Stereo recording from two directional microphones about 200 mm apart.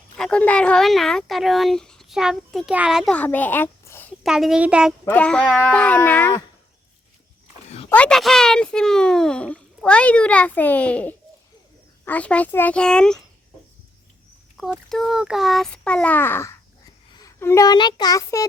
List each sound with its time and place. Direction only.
0.2 s speech: 5° left (ahead or behind)
4.2 s speech: centre (ahead or behind)
5.0 s a child's voice: 5° left (ahead or behind)
7.9 s a child's voice: 5° left (ahead or behind)
14.6 s a child's voice: centre (ahead or behind); by 18.4 s 15° left (ahead or behind)